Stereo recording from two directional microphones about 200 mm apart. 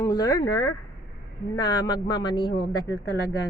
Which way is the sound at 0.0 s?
20° left (ahead or behind).